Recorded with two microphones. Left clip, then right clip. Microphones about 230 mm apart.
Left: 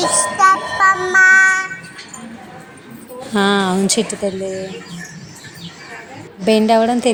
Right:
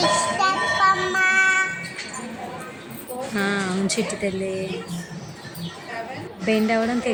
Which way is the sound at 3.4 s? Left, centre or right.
Left.